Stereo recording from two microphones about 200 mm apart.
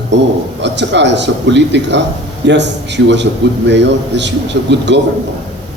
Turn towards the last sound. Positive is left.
turn(degrees=-60)  # may be behind; listen again after turning